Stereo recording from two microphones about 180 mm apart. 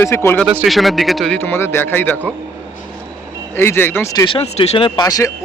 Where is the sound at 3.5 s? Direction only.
10° left (ahead or behind).